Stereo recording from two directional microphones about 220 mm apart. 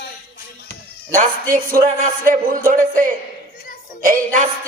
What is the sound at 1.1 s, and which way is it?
A woman's voice, 40° right (ahead or behind).